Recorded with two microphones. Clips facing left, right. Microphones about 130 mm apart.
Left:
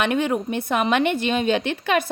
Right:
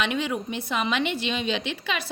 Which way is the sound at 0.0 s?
50° left (ahead or behind).